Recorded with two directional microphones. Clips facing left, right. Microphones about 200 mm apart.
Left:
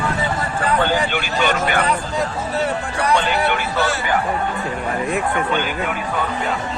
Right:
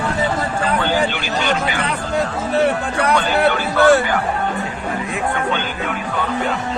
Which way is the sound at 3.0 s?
60° right (ahead or behind).